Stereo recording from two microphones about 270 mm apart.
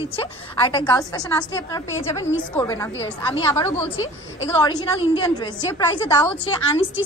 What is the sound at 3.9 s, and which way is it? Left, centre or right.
Speech, left.